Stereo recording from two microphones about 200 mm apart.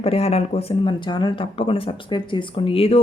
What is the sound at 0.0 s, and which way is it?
A woman's voice, 30° left (ahead or behind).